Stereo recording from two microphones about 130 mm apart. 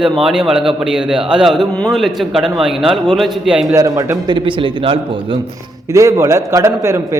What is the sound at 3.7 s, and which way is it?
Speech, 25° right (ahead or behind).